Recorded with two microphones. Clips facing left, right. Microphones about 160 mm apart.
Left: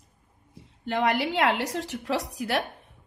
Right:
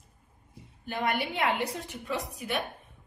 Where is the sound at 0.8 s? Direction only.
90° left.